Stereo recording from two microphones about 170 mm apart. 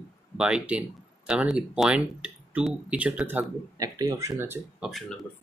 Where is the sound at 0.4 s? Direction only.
5° right (ahead or behind).